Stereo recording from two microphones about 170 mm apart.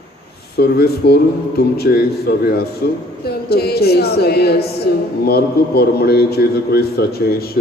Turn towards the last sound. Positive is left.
turn(degrees=65)  # may be behind; listen again after turning